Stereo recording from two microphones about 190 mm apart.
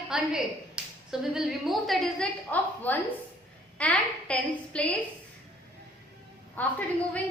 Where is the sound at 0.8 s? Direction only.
5° right (ahead or behind).